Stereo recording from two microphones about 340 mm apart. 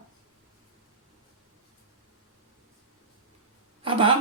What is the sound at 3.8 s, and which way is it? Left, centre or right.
Speech, centre.